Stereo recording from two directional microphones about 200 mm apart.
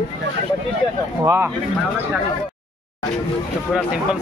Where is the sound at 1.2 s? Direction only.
15° right (ahead or behind).